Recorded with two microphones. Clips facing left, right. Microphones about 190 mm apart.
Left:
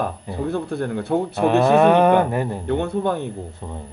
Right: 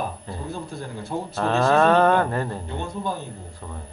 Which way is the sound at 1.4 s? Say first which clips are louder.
Left 4 dB; 15° left (ahead or behind).